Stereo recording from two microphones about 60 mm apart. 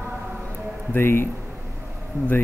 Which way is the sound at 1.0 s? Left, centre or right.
Left.